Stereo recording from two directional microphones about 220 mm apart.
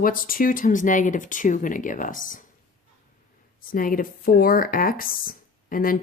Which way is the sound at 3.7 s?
40° left (ahead or behind).